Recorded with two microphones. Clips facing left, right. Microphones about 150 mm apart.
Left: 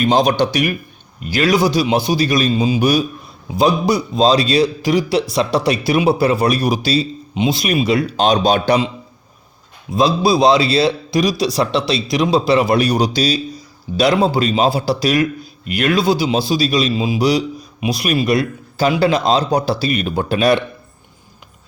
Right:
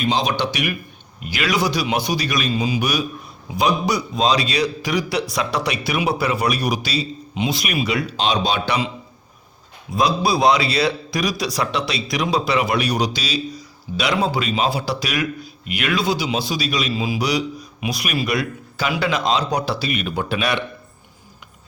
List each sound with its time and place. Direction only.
0.1 s a man's voice: 50° left (ahead or behind); by 3.0 s 30° left (ahead or behind)
4.1 s a man's voice: 35° left (ahead or behind)
8.1 s a man's voice: 45° left (ahead or behind)
9.9 s a man's voice: 25° left (ahead or behind)